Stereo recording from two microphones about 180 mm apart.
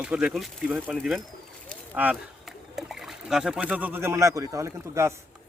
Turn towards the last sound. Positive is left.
turn(degrees=-15)  # may be behind; listen again after turning